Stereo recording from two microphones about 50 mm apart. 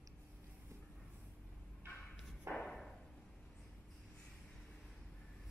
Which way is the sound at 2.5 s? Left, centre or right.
Right.